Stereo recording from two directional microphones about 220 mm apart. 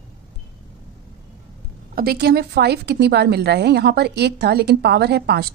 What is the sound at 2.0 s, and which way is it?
A woman's voice, 45° right (ahead or behind).